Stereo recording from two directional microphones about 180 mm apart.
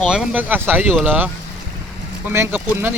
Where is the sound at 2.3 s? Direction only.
10° right (ahead or behind).